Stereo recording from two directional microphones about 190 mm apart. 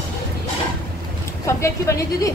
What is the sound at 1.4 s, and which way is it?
Speech, 15° left (ahead or behind).